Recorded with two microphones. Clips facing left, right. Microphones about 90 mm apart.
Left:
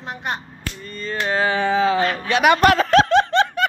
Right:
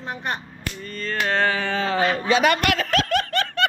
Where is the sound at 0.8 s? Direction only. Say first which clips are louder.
Left 1 dB; 5° left (ahead or behind).